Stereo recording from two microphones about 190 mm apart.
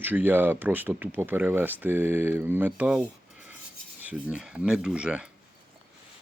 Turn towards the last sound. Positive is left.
turn(degrees=-5)  # may be behind; listen again after turning